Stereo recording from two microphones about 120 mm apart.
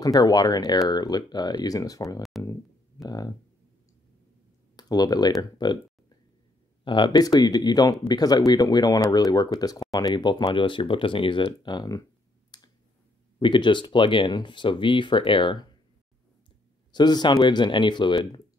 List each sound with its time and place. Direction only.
0.0 s speech: 30° left (ahead or behind)
4.7 s speech: 35° left (ahead or behind)
12.5 s clicking: 35° left (ahead or behind)
13.4 s speech: 40° left (ahead or behind)
16.9 s speech: 35° left (ahead or behind)